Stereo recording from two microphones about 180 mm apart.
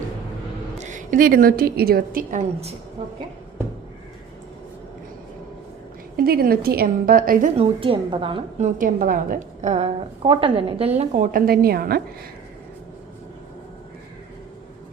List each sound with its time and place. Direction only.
0.8 s a woman's voice: 45° right (ahead or behind)
6.1 s a woman's voice: 55° right (ahead or behind)
7.5 s a woman's voice: 30° right (ahead or behind); by 12.0 s 55° right (ahead or behind)